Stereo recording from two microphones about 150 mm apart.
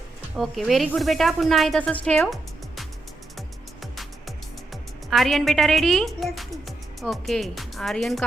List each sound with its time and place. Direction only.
0.3 s speech: centre (ahead or behind)
3.9 s a woman's voice: centre (ahead or behind)